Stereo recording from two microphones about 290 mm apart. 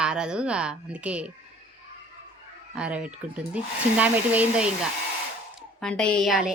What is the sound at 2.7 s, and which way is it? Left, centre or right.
A woman's voice, centre.